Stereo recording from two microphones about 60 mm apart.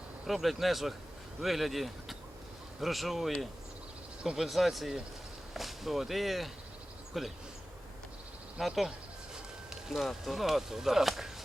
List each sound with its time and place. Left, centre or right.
0.3 s speech: centre
4.4 s speech: centre
8.5 s speech: centre
9.9 s speech: centre